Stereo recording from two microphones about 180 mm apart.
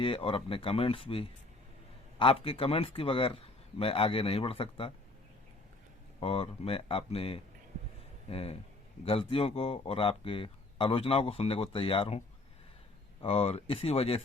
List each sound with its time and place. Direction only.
0.0 s speech: 30° left (ahead or behind)
6.1 s speech: 30° left (ahead or behind)
13.2 s speech: 30° left (ahead or behind)